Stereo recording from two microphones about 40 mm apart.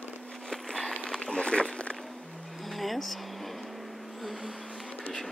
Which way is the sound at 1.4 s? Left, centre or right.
Left.